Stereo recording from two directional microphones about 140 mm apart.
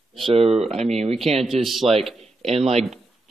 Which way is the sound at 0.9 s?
50° right (ahead or behind).